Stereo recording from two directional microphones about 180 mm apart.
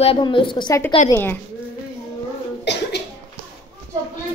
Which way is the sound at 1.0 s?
10° left (ahead or behind).